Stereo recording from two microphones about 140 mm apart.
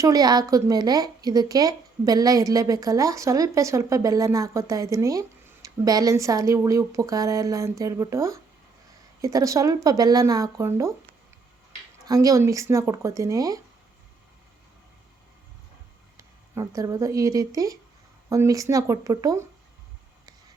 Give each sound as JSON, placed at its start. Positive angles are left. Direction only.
{"t": 0.0, "sound": "a woman's voice", "side_deg": -25}
{"t": 12.0, "sound": "a woman's voice", "side_deg": -25}
{"t": 16.1, "sound": "a woman's voice", "side_deg": -20}